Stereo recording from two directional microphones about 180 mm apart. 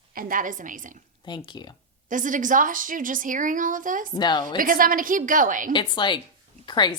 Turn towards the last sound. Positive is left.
turn(degrees=25)  # may be behind; listen again after turning